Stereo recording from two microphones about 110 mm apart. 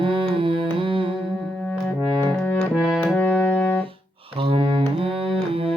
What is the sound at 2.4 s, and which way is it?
Music, 15° left (ahead or behind).